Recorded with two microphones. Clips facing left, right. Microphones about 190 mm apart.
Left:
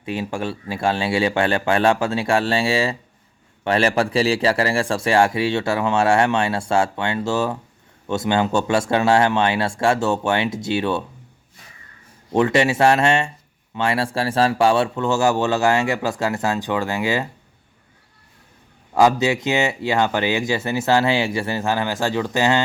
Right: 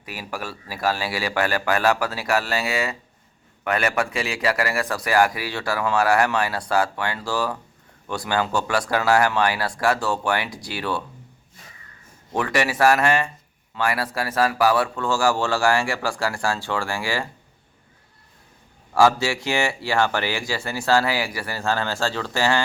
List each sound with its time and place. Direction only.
0.0 s a man's voice: 25° left (ahead or behind)
12.3 s a man's voice: 25° left (ahead or behind)
18.9 s a man's voice: 20° left (ahead or behind)